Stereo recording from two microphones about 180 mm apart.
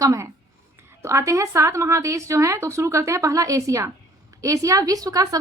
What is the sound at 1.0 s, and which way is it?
A woman's voice, 15° right (ahead or behind).